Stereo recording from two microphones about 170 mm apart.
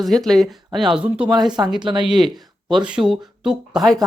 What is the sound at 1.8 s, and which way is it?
Speech, 30° right (ahead or behind).